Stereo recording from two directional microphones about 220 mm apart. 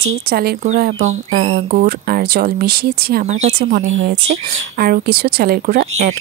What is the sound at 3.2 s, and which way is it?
Speech, 30° right (ahead or behind).